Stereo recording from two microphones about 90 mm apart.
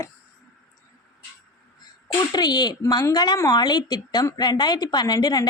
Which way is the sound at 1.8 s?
45° left (ahead or behind).